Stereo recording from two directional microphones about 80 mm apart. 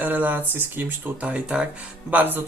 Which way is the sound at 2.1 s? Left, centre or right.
Right.